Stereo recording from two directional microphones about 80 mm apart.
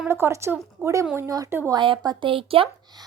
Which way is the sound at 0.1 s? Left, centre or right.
Right.